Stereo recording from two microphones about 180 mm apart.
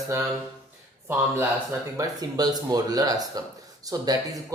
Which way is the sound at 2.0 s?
20° right (ahead or behind).